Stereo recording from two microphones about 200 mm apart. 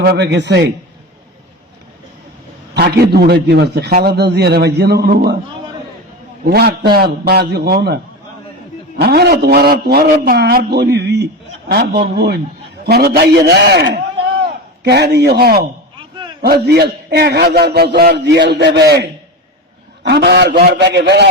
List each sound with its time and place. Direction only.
0.0 s a man's voice: 55° right (ahead or behind)
2.7 s a man's voice: 55° right (ahead or behind)
6.4 s a man's voice: 50° right (ahead or behind)
9.0 s a man's voice: 55° right (ahead or behind)